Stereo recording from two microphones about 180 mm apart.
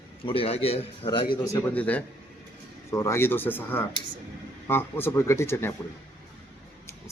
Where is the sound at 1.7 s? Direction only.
5° left (ahead or behind).